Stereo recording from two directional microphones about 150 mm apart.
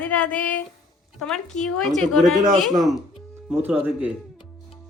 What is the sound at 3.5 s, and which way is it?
Speech, 10° right (ahead or behind).